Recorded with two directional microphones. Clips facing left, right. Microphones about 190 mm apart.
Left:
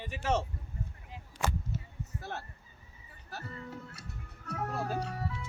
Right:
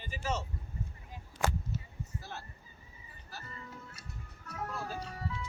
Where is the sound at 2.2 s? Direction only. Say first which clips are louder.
Left 5 dB; 55° left (ahead or behind).